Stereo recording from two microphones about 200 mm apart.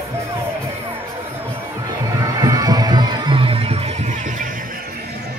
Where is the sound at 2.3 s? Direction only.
20° right (ahead or behind).